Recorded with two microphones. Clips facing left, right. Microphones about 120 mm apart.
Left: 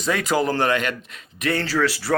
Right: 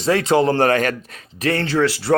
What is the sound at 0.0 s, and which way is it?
Speech, 30° right (ahead or behind).